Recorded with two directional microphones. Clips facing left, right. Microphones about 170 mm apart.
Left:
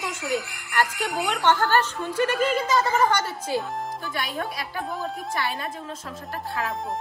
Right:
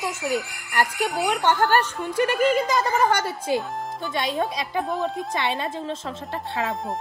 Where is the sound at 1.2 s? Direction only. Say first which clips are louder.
Right 1 dB; 15° right (ahead or behind).